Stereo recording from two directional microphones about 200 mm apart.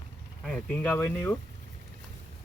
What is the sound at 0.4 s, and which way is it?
Speech, 5° left (ahead or behind).